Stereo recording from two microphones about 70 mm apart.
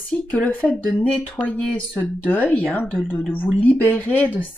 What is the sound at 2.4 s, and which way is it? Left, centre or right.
A woman's voice, left.